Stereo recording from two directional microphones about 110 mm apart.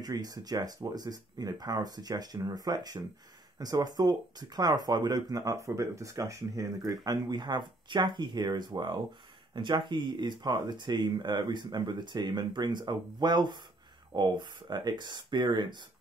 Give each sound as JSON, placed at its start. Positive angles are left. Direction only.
{"t": 0.0, "sound": "speech", "side_deg": -35}